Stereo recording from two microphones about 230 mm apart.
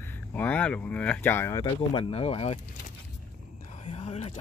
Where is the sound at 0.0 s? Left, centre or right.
Centre; by 2.6 s left.